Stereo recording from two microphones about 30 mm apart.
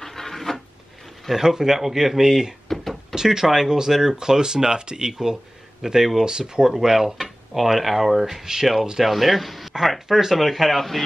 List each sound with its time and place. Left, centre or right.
0.0 s a sound: centre
1.3 s speech: centre
2.7 s knock: centre
3.2 s speech: centre
8.7 s speech: centre
9.0 s speech: centre